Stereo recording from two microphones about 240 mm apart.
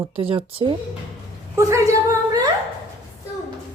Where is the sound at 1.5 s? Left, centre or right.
Centre.